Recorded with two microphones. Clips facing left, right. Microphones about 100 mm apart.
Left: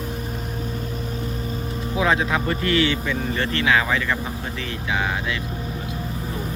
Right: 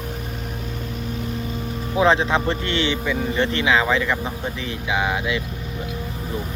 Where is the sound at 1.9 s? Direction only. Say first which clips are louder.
Right 4 dB; 30° right (ahead or behind).